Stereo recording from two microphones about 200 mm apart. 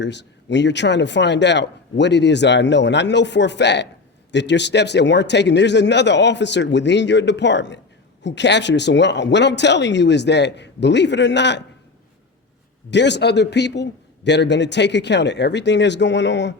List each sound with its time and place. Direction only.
0.0 s speech: 60° left (ahead or behind)
12.9 s speech: 60° left (ahead or behind)